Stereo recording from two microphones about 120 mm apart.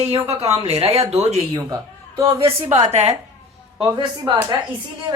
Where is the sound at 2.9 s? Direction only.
65° right (ahead or behind).